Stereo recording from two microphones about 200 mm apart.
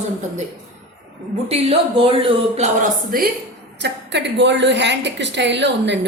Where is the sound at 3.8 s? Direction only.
60° right (ahead or behind).